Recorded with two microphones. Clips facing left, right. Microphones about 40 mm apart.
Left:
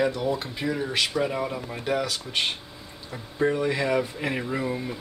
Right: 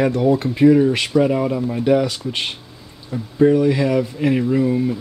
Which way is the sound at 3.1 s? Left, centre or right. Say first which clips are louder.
Right 10 dB; centre.